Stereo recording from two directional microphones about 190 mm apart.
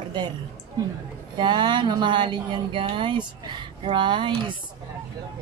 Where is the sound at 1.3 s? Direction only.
25° right (ahead or behind).